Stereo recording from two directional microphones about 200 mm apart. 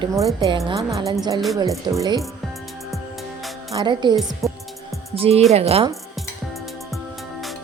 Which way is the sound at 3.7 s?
25° right (ahead or behind).